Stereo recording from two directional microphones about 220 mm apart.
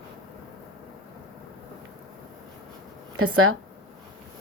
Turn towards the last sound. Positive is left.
turn(degrees=-70)  # may be behind; listen again after turning